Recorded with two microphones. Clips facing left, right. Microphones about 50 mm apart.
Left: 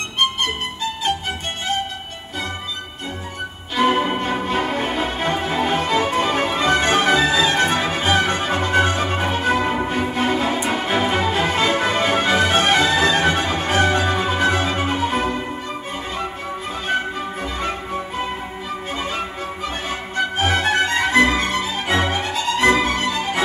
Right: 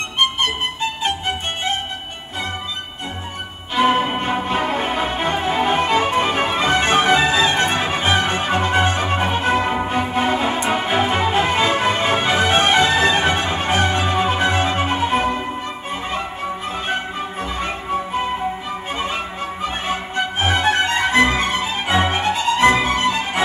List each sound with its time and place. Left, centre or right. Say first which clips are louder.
3.7 s music: right 1 dB; centre
5.1 s music: right 2 dB; right
17.4 s music: even; centre
22.7 s music: left 2 dB; centre
22.9 s music: right 2 dB; right